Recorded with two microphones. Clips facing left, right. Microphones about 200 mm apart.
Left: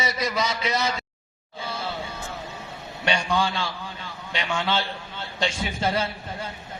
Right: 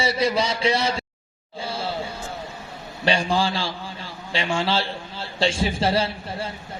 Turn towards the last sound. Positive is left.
turn(degrees=-30)  # may be behind; listen again after turning